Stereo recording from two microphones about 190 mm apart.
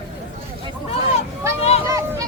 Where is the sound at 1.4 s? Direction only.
15° right (ahead or behind).